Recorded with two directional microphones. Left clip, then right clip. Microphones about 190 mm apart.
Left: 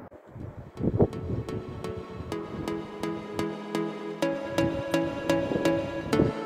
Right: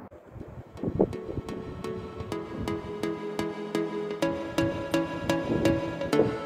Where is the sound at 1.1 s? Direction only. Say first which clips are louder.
Left 1 dB; centre (ahead or behind).